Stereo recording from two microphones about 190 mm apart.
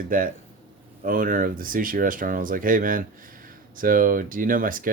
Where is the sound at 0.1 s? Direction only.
45° right (ahead or behind).